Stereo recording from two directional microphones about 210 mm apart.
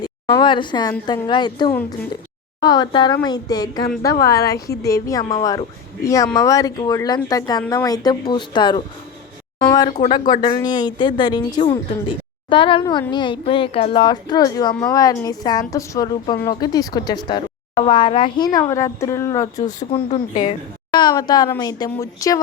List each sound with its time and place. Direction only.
0.0 s a woman's voice: 20° left (ahead or behind)
19.6 s a woman's voice: 35° left (ahead or behind); by 22.4 s 15° left (ahead or behind)